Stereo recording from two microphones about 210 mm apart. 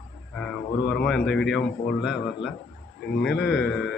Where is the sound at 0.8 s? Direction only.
Centre (ahead or behind).